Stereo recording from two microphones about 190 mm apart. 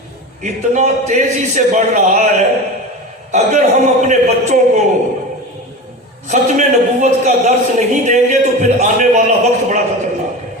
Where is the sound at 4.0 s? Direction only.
40° right (ahead or behind).